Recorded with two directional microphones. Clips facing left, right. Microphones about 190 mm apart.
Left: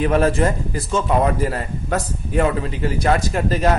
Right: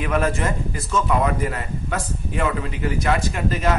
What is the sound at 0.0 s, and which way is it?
Speech, 35° left (ahead or behind).